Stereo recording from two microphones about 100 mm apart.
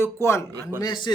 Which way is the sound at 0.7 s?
45° left (ahead or behind).